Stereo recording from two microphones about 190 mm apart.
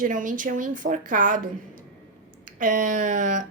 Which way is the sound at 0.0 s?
45° right (ahead or behind).